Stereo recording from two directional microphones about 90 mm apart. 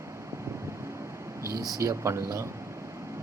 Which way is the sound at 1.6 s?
40° right (ahead or behind).